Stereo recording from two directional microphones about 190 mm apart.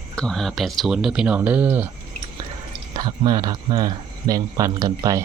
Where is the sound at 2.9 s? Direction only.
25° right (ahead or behind).